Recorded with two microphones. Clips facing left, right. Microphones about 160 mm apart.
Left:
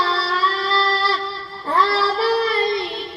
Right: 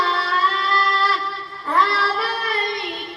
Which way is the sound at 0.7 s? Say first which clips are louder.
Left 1 dB; 30° left (ahead or behind).